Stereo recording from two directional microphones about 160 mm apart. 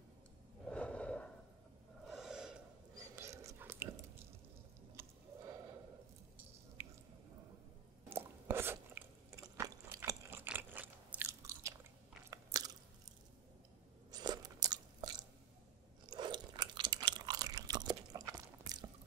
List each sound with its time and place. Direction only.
0.7 s gasp: 5° left (ahead or behind)
2.0 s gasp: 5° right (ahead or behind)
3.0 s whispering: 20° right (ahead or behind)
5.0 s a sound: 15° right (ahead or behind)
8.1 s chewing: 15° right (ahead or behind)
12.3 s biting: 20° right (ahead or behind)
14.1 s crunch: 25° right (ahead or behind)
16.1 s chewing: 30° right (ahead or behind)